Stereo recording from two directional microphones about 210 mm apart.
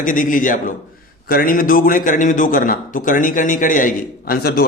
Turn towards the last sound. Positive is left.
turn(degrees=45)  # may be behind; listen again after turning